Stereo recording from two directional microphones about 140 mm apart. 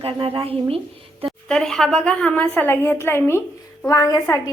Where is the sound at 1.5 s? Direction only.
5° left (ahead or behind).